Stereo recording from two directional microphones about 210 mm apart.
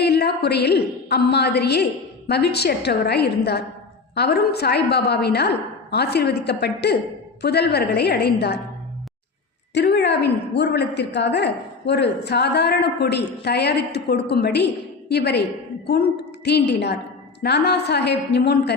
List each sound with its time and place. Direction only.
0.0 s a woman's voice: 50° left (ahead or behind)
9.7 s a woman's voice: 55° left (ahead or behind)